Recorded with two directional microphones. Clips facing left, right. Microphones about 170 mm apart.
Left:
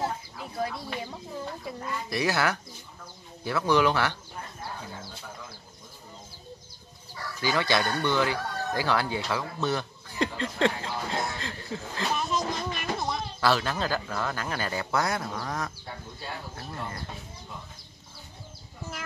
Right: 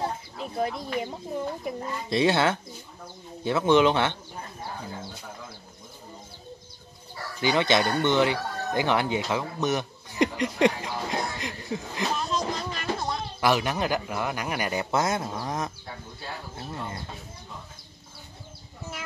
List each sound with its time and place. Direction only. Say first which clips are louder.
0.0 s chicken: right 1 dB; 20° right (ahead or behind)
1.6 s speech: right 3 dB; 20° right (ahead or behind)
7.3 s speech: right 3 dB; 20° right (ahead or behind)
11.3 s chuckle: right 3 dB; 15° right (ahead or behind)
12.1 s music: even; centre (ahead or behind)
13.4 s speech: right 2 dB; 15° right (ahead or behind)